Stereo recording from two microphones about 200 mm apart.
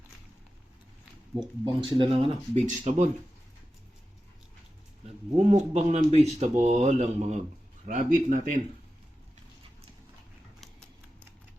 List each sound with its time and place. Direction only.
1.4 s speech: 25° right (ahead or behind)
5.0 s speech: 35° right (ahead or behind)
10.6 s a sound: 5° left (ahead or behind)